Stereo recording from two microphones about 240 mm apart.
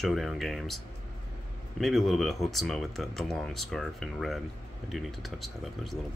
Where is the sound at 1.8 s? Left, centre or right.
Centre.